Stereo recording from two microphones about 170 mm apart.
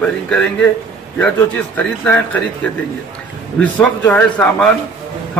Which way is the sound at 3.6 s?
10° left (ahead or behind).